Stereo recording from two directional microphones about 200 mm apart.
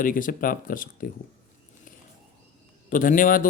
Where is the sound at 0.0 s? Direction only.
45° left (ahead or behind).